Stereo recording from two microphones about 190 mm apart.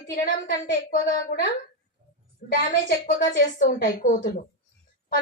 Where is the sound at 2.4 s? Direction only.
55° left (ahead or behind).